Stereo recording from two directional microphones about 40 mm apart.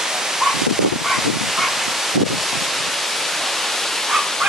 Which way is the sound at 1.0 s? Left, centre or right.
Centre.